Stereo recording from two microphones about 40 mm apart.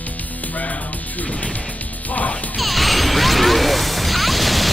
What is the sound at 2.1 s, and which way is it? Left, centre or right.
Music, left.